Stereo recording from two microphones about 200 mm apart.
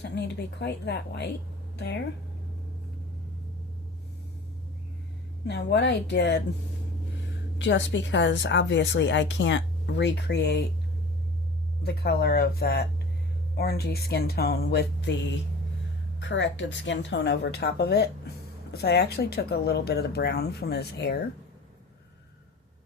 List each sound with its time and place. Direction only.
0.0 s a woman's voice: 55° left (ahead or behind)
5.5 s a woman's voice: 60° left (ahead or behind)
7.6 s a woman's voice: 65° left (ahead or behind)
11.8 s speech: 50° left (ahead or behind)
16.2 s a woman's voice: 65° left (ahead or behind)